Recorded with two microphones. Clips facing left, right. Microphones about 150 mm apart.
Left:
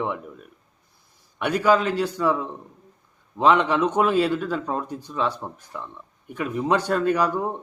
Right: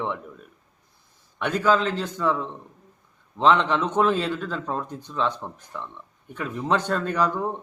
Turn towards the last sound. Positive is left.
turn(degrees=10)  # may be behind; listen again after turning